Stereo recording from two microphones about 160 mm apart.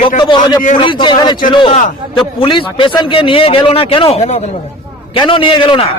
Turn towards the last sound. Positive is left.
turn(degrees=30)  # may be behind; listen again after turning